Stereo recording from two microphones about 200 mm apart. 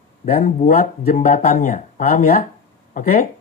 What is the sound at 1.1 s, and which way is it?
Speech, 40° left (ahead or behind).